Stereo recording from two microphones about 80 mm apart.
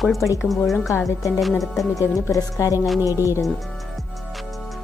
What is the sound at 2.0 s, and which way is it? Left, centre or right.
Speech, left.